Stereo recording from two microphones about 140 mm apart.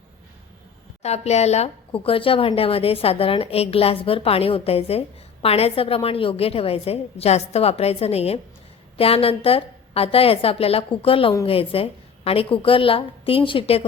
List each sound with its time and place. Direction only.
1.0 s a woman's voice: 50° left (ahead or behind)